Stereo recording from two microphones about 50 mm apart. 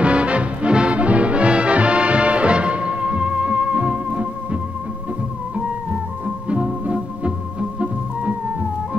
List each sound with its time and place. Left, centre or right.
0.0 s music: right
6.5 s music: right